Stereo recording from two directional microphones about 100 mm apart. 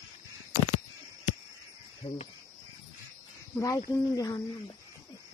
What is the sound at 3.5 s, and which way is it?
Speech, 30° left (ahead or behind).